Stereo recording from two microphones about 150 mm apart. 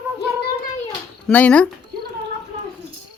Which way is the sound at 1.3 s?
10° left (ahead or behind).